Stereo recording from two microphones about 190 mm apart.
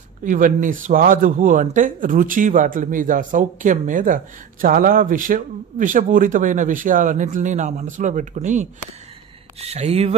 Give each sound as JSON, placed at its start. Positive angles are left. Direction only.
{"t": 0.2, "sound": "speech", "side_deg": -45}